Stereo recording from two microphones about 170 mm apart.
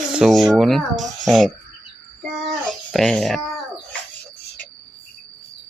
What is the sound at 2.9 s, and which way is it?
Speech, 5° left (ahead or behind).